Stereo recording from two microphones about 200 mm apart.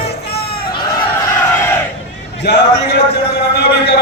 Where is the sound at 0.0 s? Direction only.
55° left (ahead or behind).